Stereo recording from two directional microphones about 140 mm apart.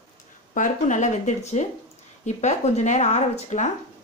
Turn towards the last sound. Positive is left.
turn(degrees=55)  # may be behind; listen again after turning